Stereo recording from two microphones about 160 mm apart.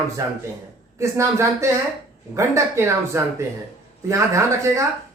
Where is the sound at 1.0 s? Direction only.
15° right (ahead or behind).